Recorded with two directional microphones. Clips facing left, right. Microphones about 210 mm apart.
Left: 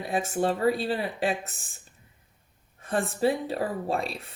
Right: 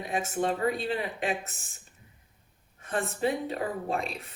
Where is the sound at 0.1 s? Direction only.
35° left (ahead or behind).